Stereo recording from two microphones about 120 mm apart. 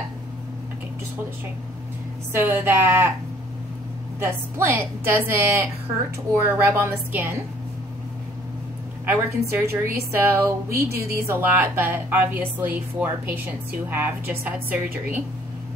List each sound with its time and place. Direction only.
2.3 s a woman's voice: 20° right (ahead or behind)
4.2 s a woman's voice: 20° right (ahead or behind)
9.0 s a woman's voice: 20° right (ahead or behind)